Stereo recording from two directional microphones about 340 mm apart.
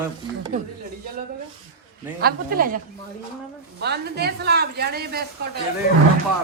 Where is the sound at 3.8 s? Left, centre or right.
Right.